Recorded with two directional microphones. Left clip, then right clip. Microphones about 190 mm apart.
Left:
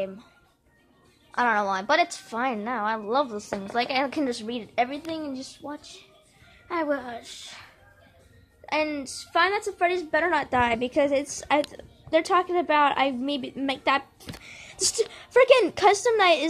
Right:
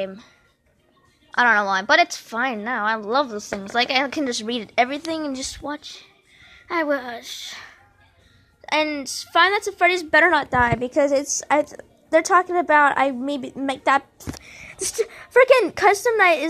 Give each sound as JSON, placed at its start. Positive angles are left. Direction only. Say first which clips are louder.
{"t": 1.3, "sound": "a woman's voice", "louder": "right 6 dB", "side_deg": -15}
{"t": 4.4, "sound": "speech", "louder": "right 6 dB", "side_deg": -35}
{"t": 5.7, "sound": "a woman's voice", "louder": "right 7 dB", "side_deg": -20}
{"t": 9.8, "sound": "a woman's voice", "louder": "right 9 dB", "side_deg": -45}
{"t": 10.5, "sound": "a woman's voice", "louder": "right 4 dB", "side_deg": 0}
{"t": 11.0, "sound": "a woman's voice", "louder": "right 6 dB", "side_deg": -10}
{"t": 12.1, "sound": "a woman's voice", "louder": "right 5 dB", "side_deg": -15}
{"t": 14.4, "sound": "a sound", "louder": "right 3 dB", "side_deg": 0}
{"t": 14.9, "sound": "a woman's voice", "louder": "right 2 dB", "side_deg": 0}